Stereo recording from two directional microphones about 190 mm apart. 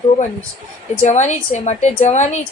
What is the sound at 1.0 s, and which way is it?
Speech, 40° left (ahead or behind).